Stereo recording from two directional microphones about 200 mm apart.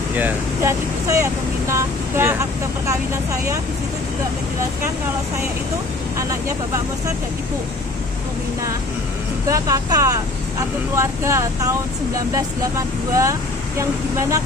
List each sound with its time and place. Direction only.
0.1 s speech: 10° right (ahead or behind)
9.5 s speech: 15° right (ahead or behind)